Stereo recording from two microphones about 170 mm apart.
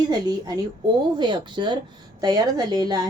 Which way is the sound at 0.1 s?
20° right (ahead or behind).